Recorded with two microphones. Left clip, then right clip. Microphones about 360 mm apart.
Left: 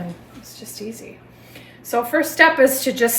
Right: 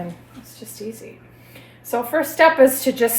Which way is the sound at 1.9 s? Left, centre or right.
Centre.